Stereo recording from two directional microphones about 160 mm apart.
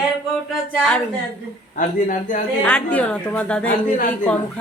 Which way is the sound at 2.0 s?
55° left (ahead or behind).